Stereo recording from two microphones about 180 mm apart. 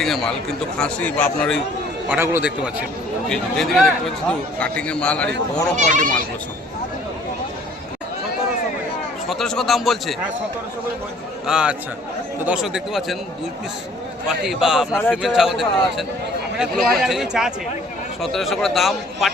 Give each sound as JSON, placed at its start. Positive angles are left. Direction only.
{"t": 0.0, "sound": "a man's voice", "side_deg": 0}
{"t": 2.0, "sound": "speech", "side_deg": -10}
{"t": 3.2, "sound": "a man's voice", "side_deg": 0}
{"t": 5.7, "sound": "speech", "side_deg": -45}
{"t": 9.3, "sound": "a man's voice", "side_deg": 0}
{"t": 11.4, "sound": "a man's voice", "side_deg": -5}
{"t": 14.3, "sound": "a man's voice", "side_deg": -5}